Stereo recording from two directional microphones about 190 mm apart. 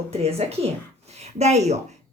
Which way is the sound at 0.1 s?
30° right (ahead or behind).